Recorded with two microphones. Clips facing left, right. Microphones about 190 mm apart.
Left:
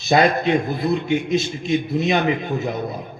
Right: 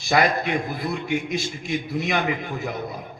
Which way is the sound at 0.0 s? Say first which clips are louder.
Left 4 dB; 25° left (ahead or behind).